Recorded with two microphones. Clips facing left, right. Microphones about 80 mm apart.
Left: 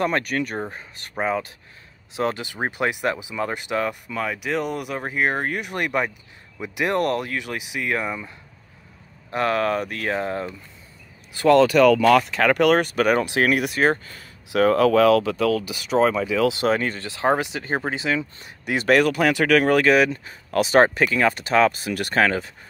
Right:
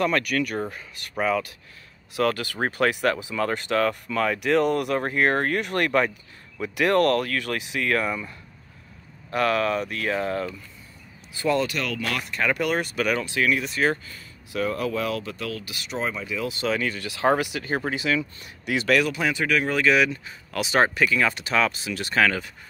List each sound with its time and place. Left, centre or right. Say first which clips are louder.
0.0 s speech: even; left
9.3 s speech: left 1 dB; left
10.1 s speech: even; left
11.3 s speech: left 9 dB; left
13.2 s speech: left 4 dB; left
13.8 s speech: left 2 dB; left
14.5 s speech: left 9 dB; left
15.9 s speech: left 11 dB; left
16.3 s speech: left 9 dB; left
16.6 s speech: left 4 dB; left
17.1 s speech: even; left
18.8 s speech: left 4 dB; left
19.8 s speech: left 3 dB; left
22.2 s speech: left 1 dB; left